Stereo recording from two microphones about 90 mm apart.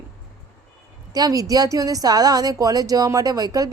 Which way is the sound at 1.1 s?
45° right (ahead or behind).